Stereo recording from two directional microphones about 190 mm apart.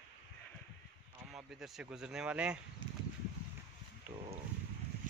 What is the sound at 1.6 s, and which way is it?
A man's voice, 5° right (ahead or behind).